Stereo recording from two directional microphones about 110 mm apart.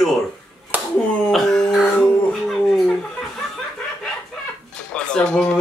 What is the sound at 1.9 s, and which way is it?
Music, 15° left (ahead or behind).